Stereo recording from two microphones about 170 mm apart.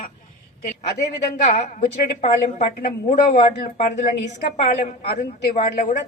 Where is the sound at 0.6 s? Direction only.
50° left (ahead or behind).